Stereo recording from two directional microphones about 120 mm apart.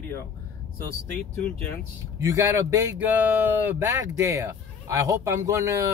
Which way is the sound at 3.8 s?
25° right (ahead or behind).